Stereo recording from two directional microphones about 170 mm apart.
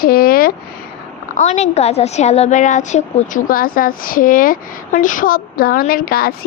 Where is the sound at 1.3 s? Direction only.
45° left (ahead or behind).